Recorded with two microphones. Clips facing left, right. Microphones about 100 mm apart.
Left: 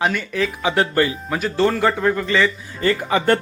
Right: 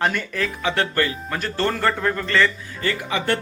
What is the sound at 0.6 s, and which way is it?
Speech, 15° left (ahead or behind).